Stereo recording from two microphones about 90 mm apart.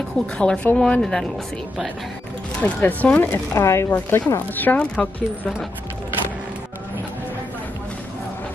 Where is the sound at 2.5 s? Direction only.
15° left (ahead or behind).